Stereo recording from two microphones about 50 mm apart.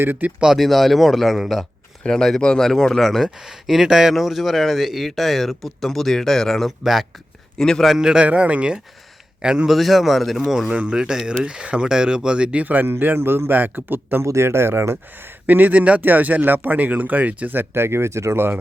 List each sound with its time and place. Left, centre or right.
0.0 s speech: right
0.3 s speech: centre
0.5 s a man's voice: centre
6.7 s a man's voice: centre
7.6 s speech: centre
7.9 s speech: centre
8.2 s speech: right
9.6 s a man's voice: centre
10.7 s speech: centre
12.6 s speech: right
13.1 s speech: right
14.2 s speech: right
15.4 s speech: right
18.3 s speech: right